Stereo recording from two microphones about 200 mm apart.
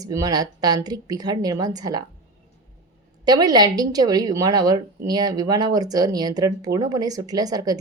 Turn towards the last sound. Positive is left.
turn(degrees=-20)  # may be behind; listen again after turning